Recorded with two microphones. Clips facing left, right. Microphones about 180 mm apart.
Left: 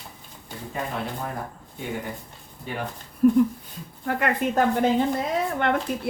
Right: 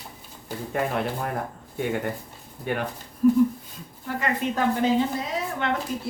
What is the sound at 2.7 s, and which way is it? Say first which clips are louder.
Speech: right 5 dB; 60° right (ahead or behind).